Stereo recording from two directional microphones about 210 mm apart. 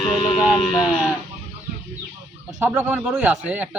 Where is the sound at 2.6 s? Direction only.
10° right (ahead or behind).